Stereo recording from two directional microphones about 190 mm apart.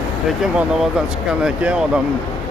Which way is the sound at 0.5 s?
5° right (ahead or behind).